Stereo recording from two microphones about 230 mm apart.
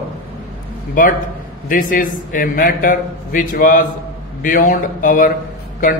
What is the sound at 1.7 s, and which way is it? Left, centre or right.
A man's voice, left.